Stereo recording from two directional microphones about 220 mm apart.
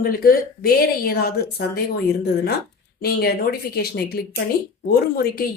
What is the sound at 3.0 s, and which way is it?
Speech, 45° left (ahead or behind).